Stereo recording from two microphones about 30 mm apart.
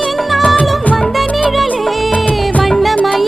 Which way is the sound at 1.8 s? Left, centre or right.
Centre.